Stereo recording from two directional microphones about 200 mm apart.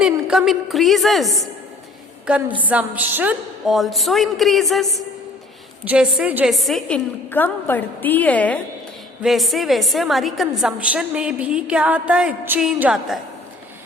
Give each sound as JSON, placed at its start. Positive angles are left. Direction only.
{"t": 0.0, "sound": "a woman's voice", "side_deg": -5}
{"t": 2.6, "sound": "a woman's voice", "side_deg": -5}